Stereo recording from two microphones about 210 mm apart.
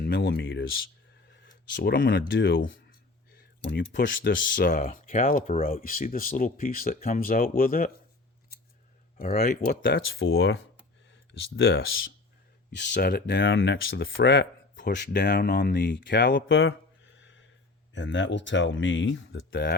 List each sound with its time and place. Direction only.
0.0 s speech: 50° left (ahead or behind)
3.7 s speech: 55° left (ahead or behind)
9.1 s speech: 45° left (ahead or behind)
10.1 s speech: 70° left (ahead or behind)
12.7 s speech: 55° left (ahead or behind)
17.9 s speech: 60° left (ahead or behind)